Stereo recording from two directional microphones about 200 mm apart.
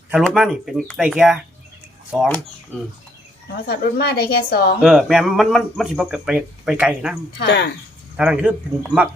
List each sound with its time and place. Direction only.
0.1 s speech: centre (ahead or behind)
3.7 s a woman's voice: 55° left (ahead or behind)
4.8 s speech: centre (ahead or behind)
7.3 s speech: 55° left (ahead or behind)
8.1 s speech: 5° right (ahead or behind)